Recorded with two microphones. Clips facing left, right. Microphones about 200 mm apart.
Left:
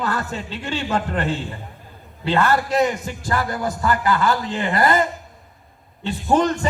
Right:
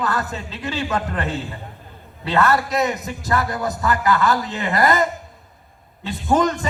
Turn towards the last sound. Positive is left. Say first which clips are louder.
# even
turn(degrees=30)  # may be behind; listen again after turning